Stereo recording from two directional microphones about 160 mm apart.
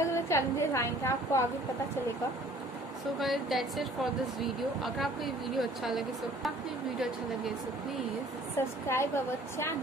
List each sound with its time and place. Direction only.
0.0 s a woman's voice: 15° left (ahead or behind)
3.2 s speech: centre (ahead or behind)
8.5 s a woman's voice: 15° left (ahead or behind)